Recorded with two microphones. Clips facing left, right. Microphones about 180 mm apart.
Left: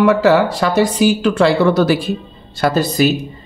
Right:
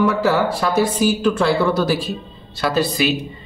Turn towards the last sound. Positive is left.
turn(degrees=45)  # may be behind; listen again after turning